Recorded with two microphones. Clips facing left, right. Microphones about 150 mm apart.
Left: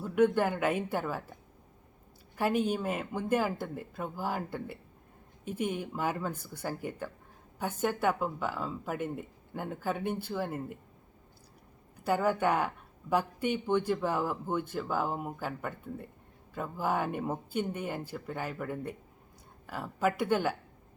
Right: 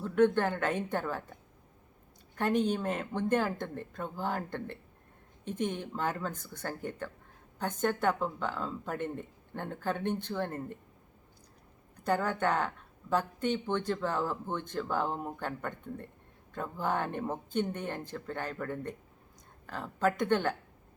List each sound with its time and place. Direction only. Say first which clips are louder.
0.0 s speech: even; 10° left (ahead or behind)
11.9 s speech: left 2 dB; 10° left (ahead or behind)